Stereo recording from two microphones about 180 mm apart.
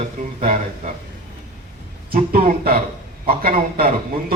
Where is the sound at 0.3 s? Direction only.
40° right (ahead or behind).